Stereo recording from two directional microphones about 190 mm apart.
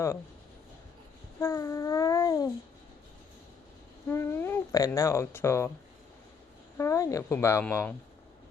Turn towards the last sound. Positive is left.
turn(degrees=15)  # may be behind; listen again after turning